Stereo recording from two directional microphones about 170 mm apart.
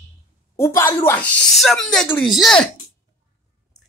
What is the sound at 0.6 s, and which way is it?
A woman's voice, 15° left (ahead or behind).